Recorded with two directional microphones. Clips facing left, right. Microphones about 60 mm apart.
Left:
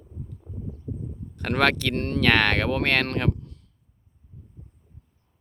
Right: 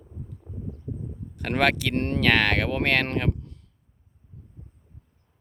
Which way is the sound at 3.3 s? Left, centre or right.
Right.